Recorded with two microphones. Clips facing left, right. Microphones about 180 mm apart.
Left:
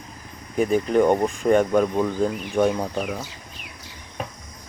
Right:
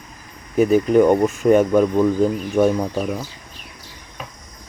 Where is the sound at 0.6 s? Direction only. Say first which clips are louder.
Right 5 dB; 5° right (ahead or behind).